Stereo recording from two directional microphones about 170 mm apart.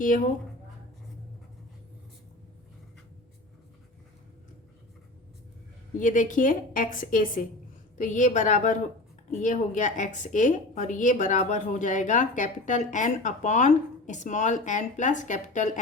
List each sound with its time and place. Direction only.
0.0 s a woman's voice: 50° left (ahead or behind)
6.0 s a woman's voice: 50° left (ahead or behind)